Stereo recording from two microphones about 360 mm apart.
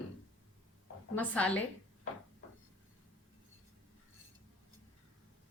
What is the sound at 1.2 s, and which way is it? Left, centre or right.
Speech, centre.